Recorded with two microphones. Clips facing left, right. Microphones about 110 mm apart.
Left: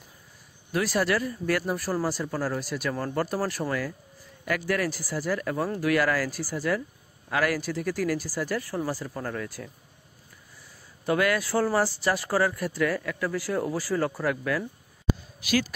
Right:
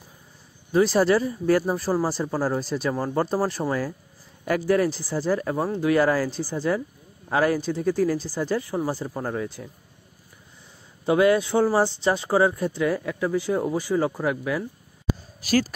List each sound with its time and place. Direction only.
0.7 s speech: 30° right (ahead or behind)
11.1 s speech: 25° right (ahead or behind)
15.4 s speech: 40° right (ahead or behind)